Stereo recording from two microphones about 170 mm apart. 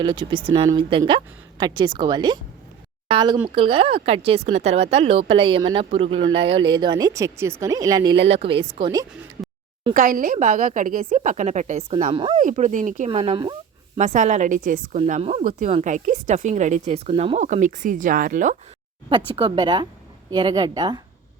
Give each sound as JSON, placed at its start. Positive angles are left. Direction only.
{"t": 0.0, "sound": "speech", "side_deg": -25}
{"t": 8.3, "sound": "speech", "side_deg": -35}
{"t": 9.9, "sound": "a woman's voice", "side_deg": -50}
{"t": 12.4, "sound": "a woman's voice", "side_deg": -45}
{"t": 13.1, "sound": "speech", "side_deg": -35}
{"t": 13.4, "sound": "a sound", "side_deg": -25}
{"t": 14.0, "sound": "a woman's voice", "side_deg": -45}
{"t": 19.0, "sound": "speech", "side_deg": -30}